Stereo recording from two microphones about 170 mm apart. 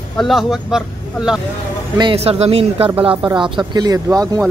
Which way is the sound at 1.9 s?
30° right (ahead or behind).